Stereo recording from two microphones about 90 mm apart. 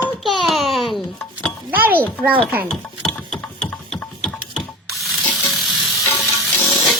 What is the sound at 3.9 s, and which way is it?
Mechanisms, centre (ahead or behind).